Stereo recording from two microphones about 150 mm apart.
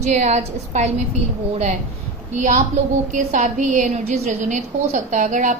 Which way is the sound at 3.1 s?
55° right (ahead or behind).